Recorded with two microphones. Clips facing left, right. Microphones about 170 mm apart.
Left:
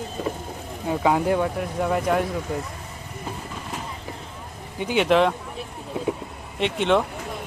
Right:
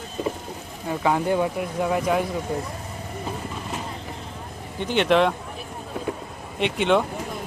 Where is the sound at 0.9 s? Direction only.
10° left (ahead or behind).